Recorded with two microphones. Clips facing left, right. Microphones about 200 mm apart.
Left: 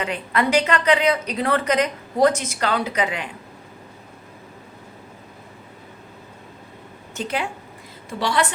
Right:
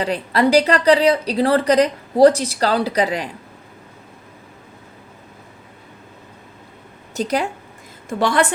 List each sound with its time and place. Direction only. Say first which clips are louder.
0.0 s a woman's voice: right 5 dB; 35° right (ahead or behind)
7.1 s speech: right 6 dB; 40° right (ahead or behind)
8.2 s a woman's voice: right 4 dB; 50° right (ahead or behind)